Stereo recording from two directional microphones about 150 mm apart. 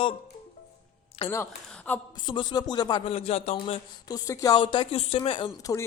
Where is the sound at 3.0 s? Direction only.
45° left (ahead or behind).